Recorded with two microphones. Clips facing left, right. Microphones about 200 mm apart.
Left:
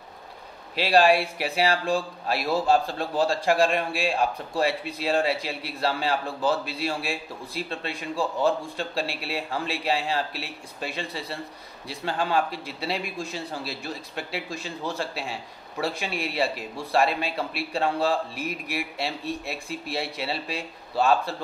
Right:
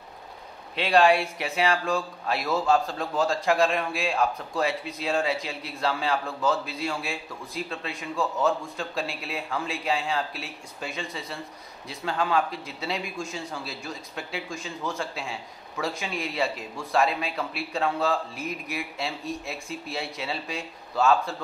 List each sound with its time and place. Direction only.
0.7 s a man's voice: 30° left (ahead or behind)